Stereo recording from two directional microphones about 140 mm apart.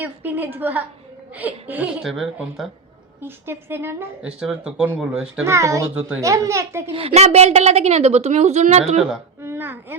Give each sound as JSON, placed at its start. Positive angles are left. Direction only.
{"t": 0.0, "sound": "speech", "side_deg": -15}
{"t": 3.2, "sound": "speech", "side_deg": -15}
{"t": 5.5, "sound": "a child's voice", "side_deg": -20}
{"t": 5.9, "sound": "speech", "side_deg": -10}
{"t": 6.1, "sound": "a child's voice", "side_deg": -25}
{"t": 6.9, "sound": "a woman's voice", "side_deg": -45}
{"t": 9.4, "sound": "speech", "side_deg": -15}